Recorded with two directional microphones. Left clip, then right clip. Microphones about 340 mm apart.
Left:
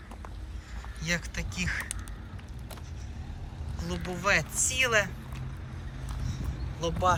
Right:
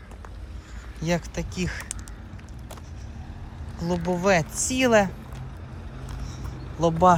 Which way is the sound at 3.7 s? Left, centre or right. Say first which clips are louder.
Right 10 dB; centre.